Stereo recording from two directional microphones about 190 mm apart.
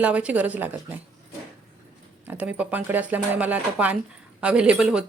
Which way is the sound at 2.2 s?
10° right (ahead or behind).